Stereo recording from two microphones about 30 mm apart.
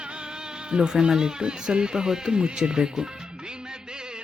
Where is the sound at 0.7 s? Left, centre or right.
Right.